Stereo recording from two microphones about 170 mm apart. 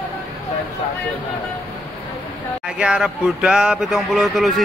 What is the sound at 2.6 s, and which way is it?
Speech, 5° right (ahead or behind).